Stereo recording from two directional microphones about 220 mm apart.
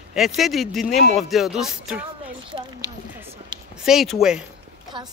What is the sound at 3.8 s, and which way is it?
Speech, centre (ahead or behind).